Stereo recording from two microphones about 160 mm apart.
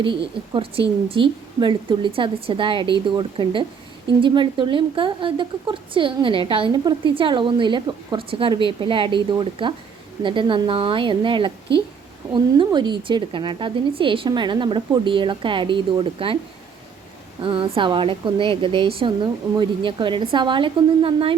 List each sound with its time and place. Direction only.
0.5 s a woman's voice: 35° right (ahead or behind)
17.4 s a woman's voice: 35° right (ahead or behind)